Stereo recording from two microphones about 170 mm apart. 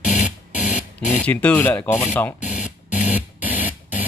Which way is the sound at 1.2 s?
10° left (ahead or behind).